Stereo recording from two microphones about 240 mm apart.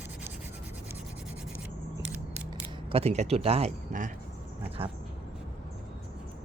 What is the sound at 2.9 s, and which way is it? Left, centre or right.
Speech, right.